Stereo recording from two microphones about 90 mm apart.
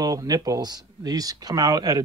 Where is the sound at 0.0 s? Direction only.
45° right (ahead or behind).